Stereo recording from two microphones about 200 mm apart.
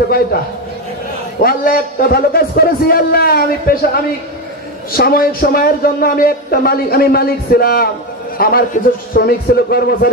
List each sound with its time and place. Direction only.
1.4 s a man's voice: 50° left (ahead or behind)